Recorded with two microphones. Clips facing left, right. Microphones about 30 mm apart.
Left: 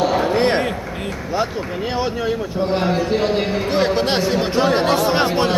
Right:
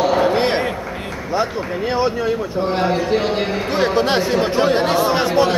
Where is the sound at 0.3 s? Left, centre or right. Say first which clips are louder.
Even; centre.